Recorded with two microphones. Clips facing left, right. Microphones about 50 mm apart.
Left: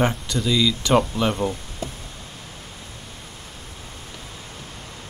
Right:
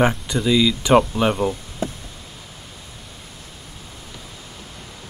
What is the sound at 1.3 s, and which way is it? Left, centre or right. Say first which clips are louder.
Speech: right 3 dB; centre.